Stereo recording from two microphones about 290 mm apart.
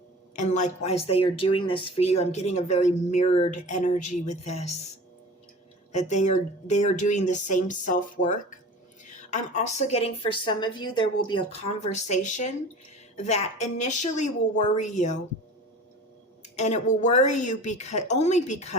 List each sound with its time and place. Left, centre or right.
0.3 s speech: left
5.9 s a woman's voice: left
16.4 s speech: left